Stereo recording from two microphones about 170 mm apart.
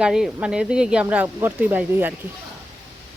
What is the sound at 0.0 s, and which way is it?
Speech, 5° right (ahead or behind).